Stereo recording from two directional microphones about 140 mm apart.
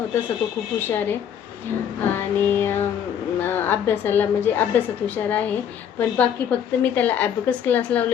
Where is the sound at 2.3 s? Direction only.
15° left (ahead or behind).